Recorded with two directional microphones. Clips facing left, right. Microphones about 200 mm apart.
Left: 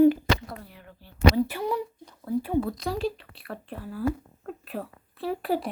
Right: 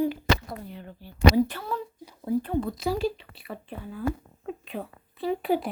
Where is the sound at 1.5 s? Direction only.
15° left (ahead or behind).